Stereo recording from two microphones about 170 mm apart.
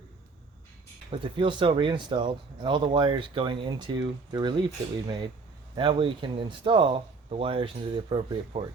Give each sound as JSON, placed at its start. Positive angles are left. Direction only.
{"t": 1.2, "sound": "speech", "side_deg": -30}